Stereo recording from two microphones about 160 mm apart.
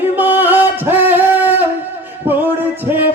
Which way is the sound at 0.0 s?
10° right (ahead or behind).